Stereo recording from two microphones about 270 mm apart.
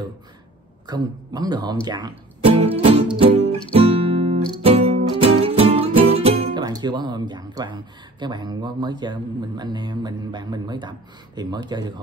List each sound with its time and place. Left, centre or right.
0.8 s speech: centre
3.2 s guitar: right
5.4 s speech: right